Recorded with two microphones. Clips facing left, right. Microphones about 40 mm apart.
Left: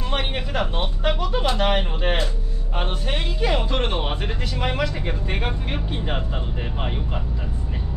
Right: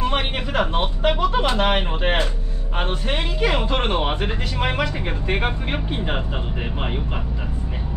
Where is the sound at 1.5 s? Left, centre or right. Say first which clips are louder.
Right 2 dB; centre.